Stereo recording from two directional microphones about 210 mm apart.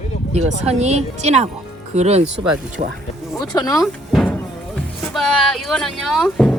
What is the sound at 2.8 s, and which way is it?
Speech, 35° right (ahead or behind).